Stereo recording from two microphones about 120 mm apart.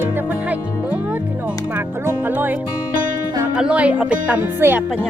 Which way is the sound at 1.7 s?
15° right (ahead or behind).